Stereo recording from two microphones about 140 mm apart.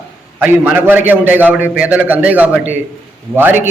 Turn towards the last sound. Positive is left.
turn(degrees=-15)  # may be behind; listen again after turning